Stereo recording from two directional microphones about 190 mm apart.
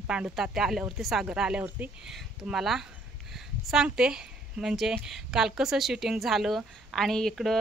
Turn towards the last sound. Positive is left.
turn(degrees=0)  # may be behind; listen again after turning